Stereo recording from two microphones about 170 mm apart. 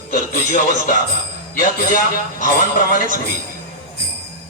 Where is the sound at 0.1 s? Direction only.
50° left (ahead or behind).